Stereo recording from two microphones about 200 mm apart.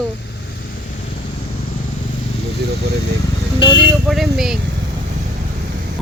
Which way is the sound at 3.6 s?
25° left (ahead or behind).